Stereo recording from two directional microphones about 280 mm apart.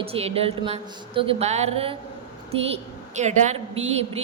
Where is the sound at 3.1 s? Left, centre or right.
Right.